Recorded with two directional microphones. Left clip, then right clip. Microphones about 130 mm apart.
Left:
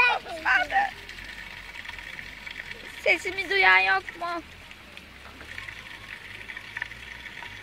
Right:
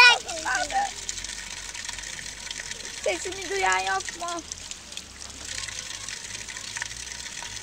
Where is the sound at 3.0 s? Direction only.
10° left (ahead or behind).